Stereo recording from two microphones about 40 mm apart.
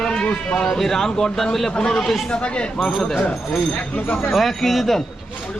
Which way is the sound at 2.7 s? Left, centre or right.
Centre.